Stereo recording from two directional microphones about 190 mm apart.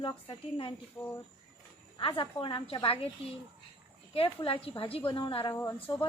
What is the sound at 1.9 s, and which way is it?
A woman's voice, 25° left (ahead or behind).